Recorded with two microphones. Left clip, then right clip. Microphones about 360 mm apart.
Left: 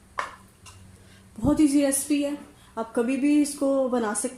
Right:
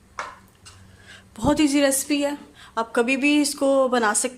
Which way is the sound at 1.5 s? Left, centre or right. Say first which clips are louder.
Right 1 dB; right.